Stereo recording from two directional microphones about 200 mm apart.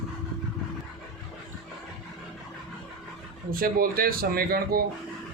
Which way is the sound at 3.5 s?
45° right (ahead or behind).